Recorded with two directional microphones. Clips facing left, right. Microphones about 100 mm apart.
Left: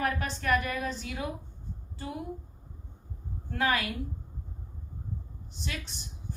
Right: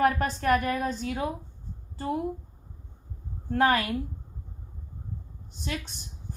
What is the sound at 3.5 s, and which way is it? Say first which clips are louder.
Speech: right 6 dB; 45° right (ahead or behind).